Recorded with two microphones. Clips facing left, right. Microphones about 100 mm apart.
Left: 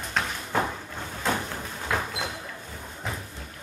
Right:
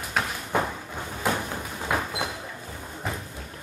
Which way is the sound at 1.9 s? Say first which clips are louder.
Right 1 dB; 15° right (ahead or behind).